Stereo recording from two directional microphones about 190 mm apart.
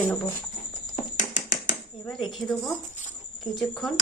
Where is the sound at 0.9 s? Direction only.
40° left (ahead or behind).